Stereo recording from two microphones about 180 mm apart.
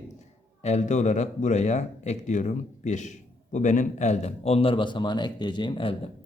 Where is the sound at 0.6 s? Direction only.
40° left (ahead or behind).